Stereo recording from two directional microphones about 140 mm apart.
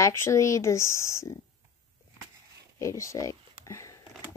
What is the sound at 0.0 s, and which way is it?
Speech, 20° left (ahead or behind).